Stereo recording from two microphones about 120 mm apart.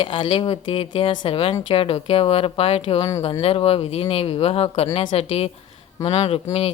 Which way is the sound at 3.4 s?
50° left (ahead or behind).